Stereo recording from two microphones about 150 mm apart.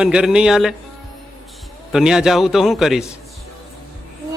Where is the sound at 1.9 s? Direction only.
5° right (ahead or behind).